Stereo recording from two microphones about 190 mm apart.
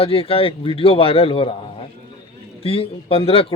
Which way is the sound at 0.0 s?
30° left (ahead or behind).